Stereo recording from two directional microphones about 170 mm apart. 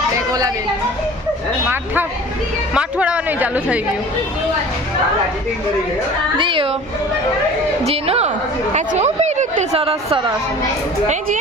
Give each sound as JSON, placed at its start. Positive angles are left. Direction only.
{"t": 2.7, "sound": "a man's voice", "side_deg": -5}
{"t": 6.3, "sound": "a woman's voice", "side_deg": -30}
{"t": 7.9, "sound": "a woman's voice", "side_deg": -35}